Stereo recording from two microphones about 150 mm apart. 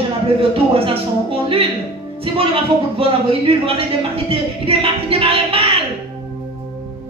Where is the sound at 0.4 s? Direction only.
40° right (ahead or behind).